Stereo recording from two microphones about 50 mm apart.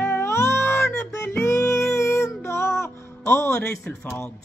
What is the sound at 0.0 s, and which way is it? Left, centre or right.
Music, left.